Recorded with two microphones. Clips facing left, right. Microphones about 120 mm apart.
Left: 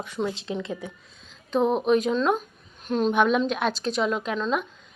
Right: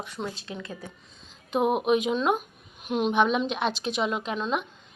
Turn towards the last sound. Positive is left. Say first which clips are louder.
# left 2 dB
turn(degrees=-5)  # may be behind; listen again after turning